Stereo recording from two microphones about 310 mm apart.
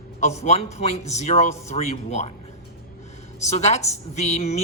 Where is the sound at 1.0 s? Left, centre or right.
Left.